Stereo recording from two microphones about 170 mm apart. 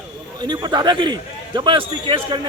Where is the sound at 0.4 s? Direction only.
25° right (ahead or behind).